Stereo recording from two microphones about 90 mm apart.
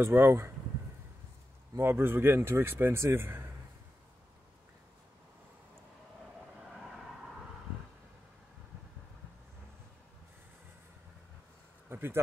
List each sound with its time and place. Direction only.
0.0 s speech: 25° right (ahead or behind)
1.8 s speech: 30° right (ahead or behind)
6.7 s vehicle: centre (ahead or behind)
11.9 s a sound: 25° right (ahead or behind)